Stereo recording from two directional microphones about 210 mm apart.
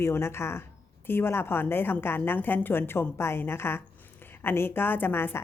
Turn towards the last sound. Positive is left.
turn(degrees=10)  # may be behind; listen again after turning